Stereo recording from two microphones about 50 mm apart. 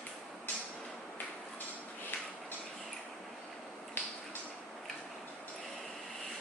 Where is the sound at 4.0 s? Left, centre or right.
Left.